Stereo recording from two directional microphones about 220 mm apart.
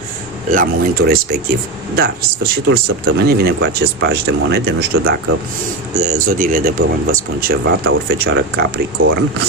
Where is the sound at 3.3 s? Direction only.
45° right (ahead or behind).